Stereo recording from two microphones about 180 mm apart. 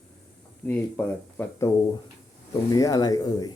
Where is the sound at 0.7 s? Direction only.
10° left (ahead or behind).